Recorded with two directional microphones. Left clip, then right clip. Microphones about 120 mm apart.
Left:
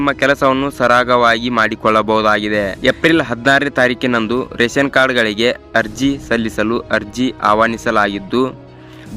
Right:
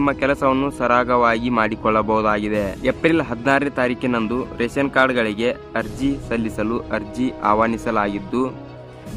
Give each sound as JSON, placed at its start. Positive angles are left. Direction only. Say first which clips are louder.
{"t": 0.0, "sound": "speech", "louder": "left 5 dB", "side_deg": 25}